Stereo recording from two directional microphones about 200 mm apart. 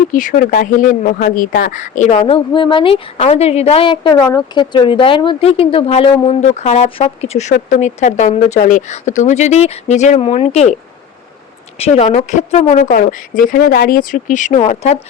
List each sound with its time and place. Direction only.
0.1 s speech: 40° left (ahead or behind)
11.8 s speech: 30° left (ahead or behind)